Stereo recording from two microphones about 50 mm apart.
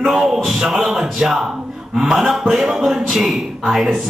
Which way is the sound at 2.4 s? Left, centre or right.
Right.